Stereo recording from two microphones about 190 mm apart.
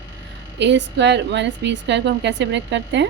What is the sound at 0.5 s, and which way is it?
A woman's voice, 65° right (ahead or behind).